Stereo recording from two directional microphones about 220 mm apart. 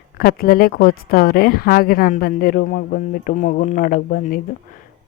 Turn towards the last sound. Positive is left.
turn(degrees=40)  # may be behind; listen again after turning